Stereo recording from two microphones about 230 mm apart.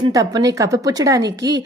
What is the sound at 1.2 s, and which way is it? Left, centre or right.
Speech, right.